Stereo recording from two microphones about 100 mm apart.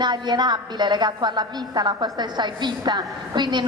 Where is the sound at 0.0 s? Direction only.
45° right (ahead or behind).